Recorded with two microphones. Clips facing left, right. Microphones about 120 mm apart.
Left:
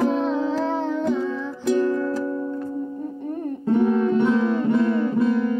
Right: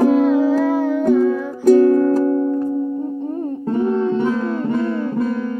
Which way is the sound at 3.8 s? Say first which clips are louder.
Right 2 dB; 30° right (ahead or behind).